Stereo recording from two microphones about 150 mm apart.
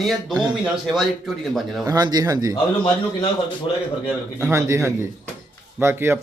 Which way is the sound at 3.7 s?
35° left (ahead or behind).